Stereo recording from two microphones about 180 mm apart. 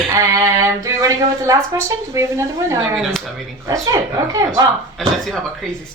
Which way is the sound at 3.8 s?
20° right (ahead or behind).